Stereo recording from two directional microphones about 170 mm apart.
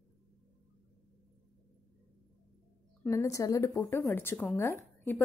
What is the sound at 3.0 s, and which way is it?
A woman's voice, 20° left (ahead or behind).